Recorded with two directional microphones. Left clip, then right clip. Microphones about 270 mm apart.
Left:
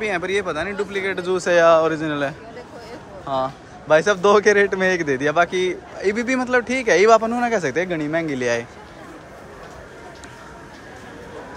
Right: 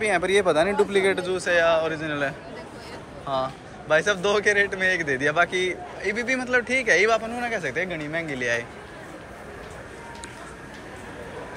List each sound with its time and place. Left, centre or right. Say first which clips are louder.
0.0 s speech: right 1 dB; centre
1.2 s a man's voice: left 6 dB; left
5.0 s a man's voice: left 3 dB; centre